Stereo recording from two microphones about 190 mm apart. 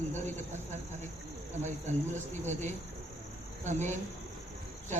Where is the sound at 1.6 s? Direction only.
40° right (ahead or behind).